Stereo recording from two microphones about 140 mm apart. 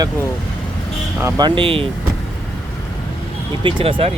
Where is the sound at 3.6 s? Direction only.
40° right (ahead or behind).